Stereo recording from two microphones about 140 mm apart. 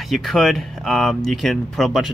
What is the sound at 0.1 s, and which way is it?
Speech, centre (ahead or behind).